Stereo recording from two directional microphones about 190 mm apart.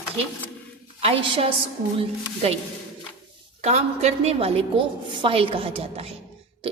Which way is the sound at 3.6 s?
35° right (ahead or behind).